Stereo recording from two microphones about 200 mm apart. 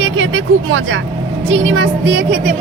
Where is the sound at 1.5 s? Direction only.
75° right (ahead or behind).